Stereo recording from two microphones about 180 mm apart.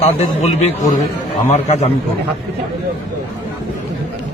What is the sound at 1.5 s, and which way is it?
Speech, 35° left (ahead or behind).